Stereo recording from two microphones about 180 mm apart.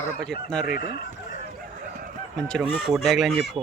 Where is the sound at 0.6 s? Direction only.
55° left (ahead or behind).